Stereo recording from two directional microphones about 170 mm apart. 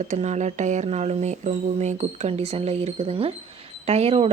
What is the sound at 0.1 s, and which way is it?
Speech, 40° right (ahead or behind).